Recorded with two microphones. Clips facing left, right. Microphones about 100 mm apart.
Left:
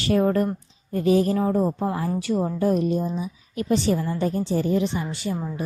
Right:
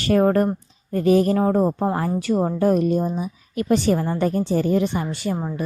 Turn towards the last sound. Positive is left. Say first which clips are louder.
# right 3 dB
turn(degrees=-45)  # may be behind; listen again after turning